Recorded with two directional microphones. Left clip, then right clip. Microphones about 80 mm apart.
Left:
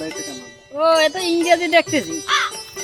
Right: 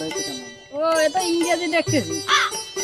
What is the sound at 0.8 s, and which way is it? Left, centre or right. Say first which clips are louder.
Music: left 4 dB; right.